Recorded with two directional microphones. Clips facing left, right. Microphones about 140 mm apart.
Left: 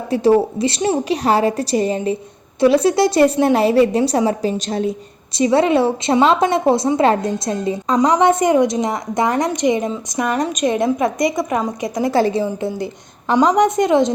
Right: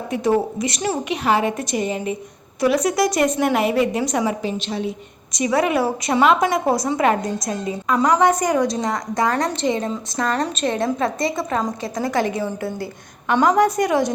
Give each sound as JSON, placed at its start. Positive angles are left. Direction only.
{"t": 0.1, "sound": "a woman's voice", "side_deg": 30}
{"t": 5.3, "sound": "a woman's voice", "side_deg": 30}
{"t": 12.1, "sound": "a woman's voice", "side_deg": 30}
{"t": 12.4, "sound": "a woman's voice", "side_deg": 15}